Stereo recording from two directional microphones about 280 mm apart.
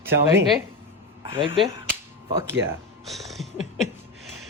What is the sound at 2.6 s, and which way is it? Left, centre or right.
Cat, centre.